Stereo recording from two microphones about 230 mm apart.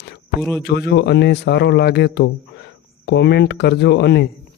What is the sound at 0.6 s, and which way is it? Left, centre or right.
A man's voice, left.